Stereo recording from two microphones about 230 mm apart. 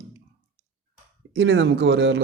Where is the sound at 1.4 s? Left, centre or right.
Right.